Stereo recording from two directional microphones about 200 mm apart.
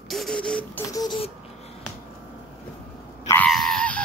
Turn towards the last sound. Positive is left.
turn(degrees=5)  # may be behind; listen again after turning